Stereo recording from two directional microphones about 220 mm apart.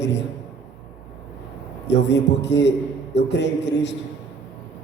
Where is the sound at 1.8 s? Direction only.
50° left (ahead or behind).